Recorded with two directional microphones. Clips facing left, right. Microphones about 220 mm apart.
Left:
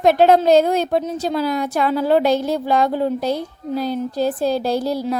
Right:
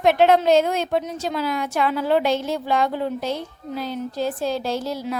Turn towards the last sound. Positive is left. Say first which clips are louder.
# left 5 dB
turn(degrees=35)  # may be behind; listen again after turning